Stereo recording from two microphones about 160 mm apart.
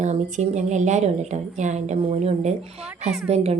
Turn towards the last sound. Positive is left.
turn(degrees=-40)  # may be behind; listen again after turning